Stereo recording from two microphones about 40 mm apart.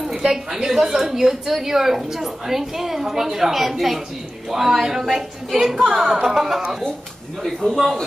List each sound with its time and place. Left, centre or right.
0.2 s a woman's voice: centre
7.4 s a man's voice: centre